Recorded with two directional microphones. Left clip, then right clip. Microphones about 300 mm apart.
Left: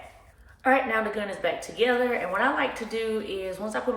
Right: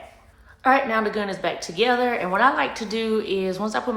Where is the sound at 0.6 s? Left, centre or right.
Centre.